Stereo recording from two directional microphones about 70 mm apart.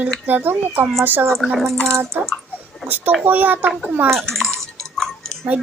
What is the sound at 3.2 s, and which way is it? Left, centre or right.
Speech, right.